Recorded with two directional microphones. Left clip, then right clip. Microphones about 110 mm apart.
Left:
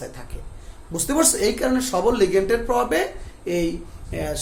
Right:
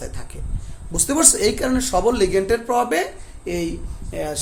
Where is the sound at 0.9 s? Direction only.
60° right (ahead or behind).